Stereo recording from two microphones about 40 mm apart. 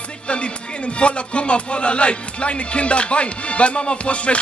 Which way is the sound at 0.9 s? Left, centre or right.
Left.